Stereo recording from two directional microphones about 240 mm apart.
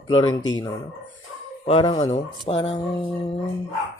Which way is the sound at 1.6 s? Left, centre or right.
Left.